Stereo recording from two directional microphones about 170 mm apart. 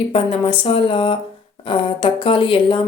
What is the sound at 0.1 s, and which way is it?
A woman's voice, 35° left (ahead or behind).